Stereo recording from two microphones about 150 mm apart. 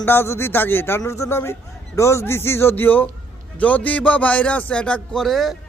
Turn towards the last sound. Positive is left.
turn(degrees=0)  # may be behind; listen again after turning